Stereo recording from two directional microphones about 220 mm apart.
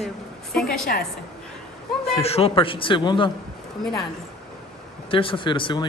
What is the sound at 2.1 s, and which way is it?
A man's voice, 25° left (ahead or behind).